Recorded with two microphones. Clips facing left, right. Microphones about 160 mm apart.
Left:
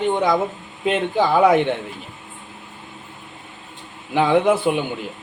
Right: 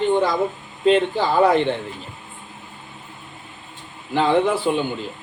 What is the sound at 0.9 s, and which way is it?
Speech, 15° left (ahead or behind).